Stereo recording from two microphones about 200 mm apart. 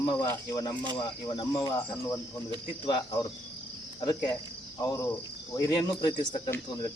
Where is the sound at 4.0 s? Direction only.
20° left (ahead or behind).